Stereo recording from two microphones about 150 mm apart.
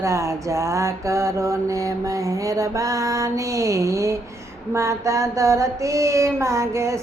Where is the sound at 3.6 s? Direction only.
20° right (ahead or behind).